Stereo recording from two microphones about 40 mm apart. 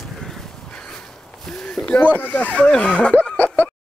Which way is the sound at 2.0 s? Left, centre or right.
Left.